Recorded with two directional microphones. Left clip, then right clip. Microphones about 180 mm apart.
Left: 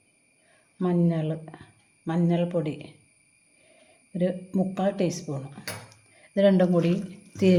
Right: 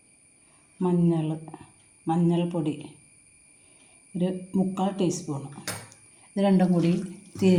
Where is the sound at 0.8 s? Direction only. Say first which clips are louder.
Right 1 dB; 30° left (ahead or behind).